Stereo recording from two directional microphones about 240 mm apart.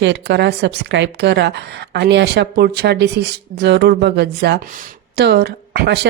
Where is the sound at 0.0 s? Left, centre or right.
Right.